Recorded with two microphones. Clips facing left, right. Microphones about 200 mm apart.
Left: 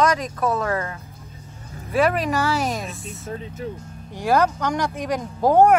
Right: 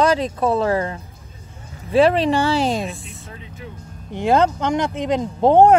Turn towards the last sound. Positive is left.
turn(degrees=-25)  # may be behind; listen again after turning